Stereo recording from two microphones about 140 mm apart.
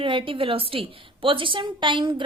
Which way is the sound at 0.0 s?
35° right (ahead or behind).